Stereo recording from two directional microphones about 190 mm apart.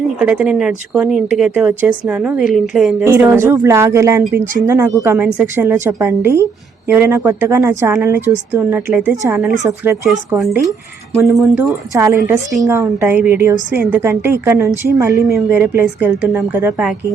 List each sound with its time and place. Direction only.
0.2 s speech: 5° right (ahead or behind)
3.0 s a woman's voice: 10° right (ahead or behind)
11.3 s speech: centre (ahead or behind)
11.6 s a woman's voice: 15° right (ahead or behind)